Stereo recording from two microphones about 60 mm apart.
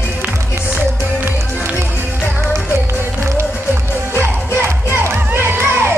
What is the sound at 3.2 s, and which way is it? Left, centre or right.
Music, right.